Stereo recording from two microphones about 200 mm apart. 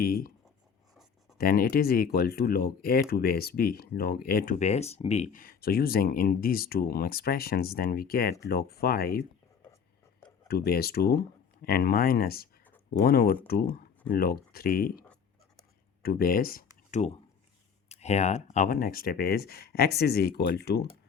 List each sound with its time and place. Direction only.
0.0 s speech: 45° left (ahead or behind)
1.4 s speech: 45° left (ahead or behind)
10.5 s speech: 50° left (ahead or behind)
15.0 s writing: 5° left (ahead or behind)
16.0 s speech: 45° left (ahead or behind)